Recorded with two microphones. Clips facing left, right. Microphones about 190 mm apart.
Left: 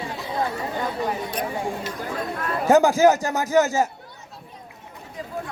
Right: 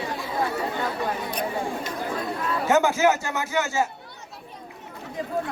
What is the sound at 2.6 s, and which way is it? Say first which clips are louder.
Speech: left 5 dB; 35° left (ahead or behind).